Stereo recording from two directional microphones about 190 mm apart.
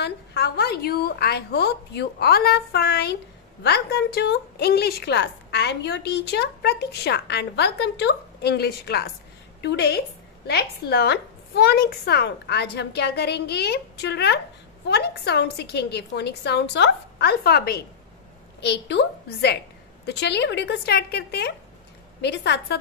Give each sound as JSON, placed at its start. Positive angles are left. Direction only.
{"t": 0.0, "sound": "a woman's voice", "side_deg": 60}